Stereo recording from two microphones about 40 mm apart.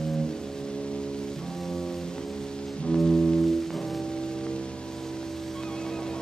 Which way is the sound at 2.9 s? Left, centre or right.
Centre.